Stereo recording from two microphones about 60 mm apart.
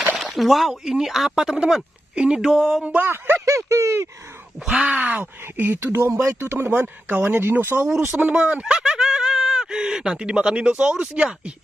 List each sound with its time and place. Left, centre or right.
0.2 s speech: centre
2.8 s speech: right
3.4 s speech: right
4.6 s speech: centre
4.9 s speech: right
5.8 s speech: right
8.3 s speech: centre